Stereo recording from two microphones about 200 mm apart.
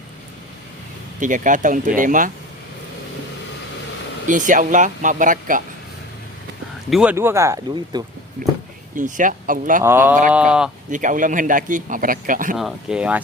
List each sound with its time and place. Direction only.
1.2 s a man's voice: 40° right (ahead or behind)
4.3 s a man's voice: 40° right (ahead or behind)
6.9 s speech: 5° right (ahead or behind)
9.0 s a man's voice: 40° right (ahead or behind)
9.8 s speech: 10° right (ahead or behind)
10.9 s a man's voice: 40° right (ahead or behind)
12.5 s speech: centre (ahead or behind)